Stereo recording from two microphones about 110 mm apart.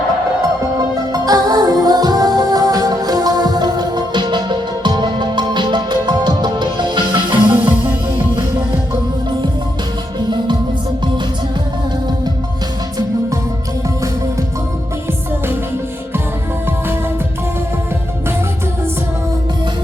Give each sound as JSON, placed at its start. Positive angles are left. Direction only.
{"t": 1.1, "sound": "music", "side_deg": -35}
{"t": 7.5, "sound": "music", "side_deg": -15}
{"t": 10.2, "sound": "music", "side_deg": -45}